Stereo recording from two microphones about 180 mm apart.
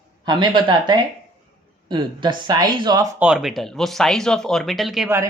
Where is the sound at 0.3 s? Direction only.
25° right (ahead or behind).